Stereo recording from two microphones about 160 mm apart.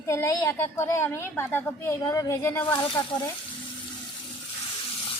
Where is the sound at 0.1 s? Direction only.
20° left (ahead or behind).